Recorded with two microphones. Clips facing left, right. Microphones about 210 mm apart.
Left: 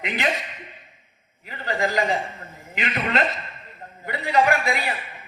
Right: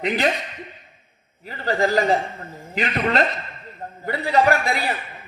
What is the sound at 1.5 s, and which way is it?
A man's voice, 35° right (ahead or behind).